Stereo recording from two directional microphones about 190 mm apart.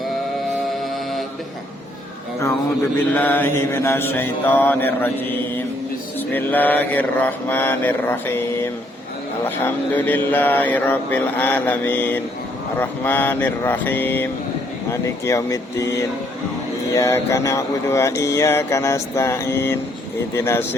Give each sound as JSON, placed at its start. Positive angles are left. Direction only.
{"t": 3.1, "sound": "mantra", "side_deg": 10}
{"t": 6.1, "sound": "mantra", "side_deg": 10}